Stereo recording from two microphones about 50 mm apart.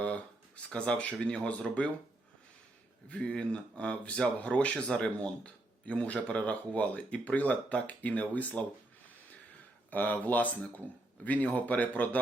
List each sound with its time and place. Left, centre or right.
0.0 s speech: left
3.1 s speech: left
9.9 s speech: left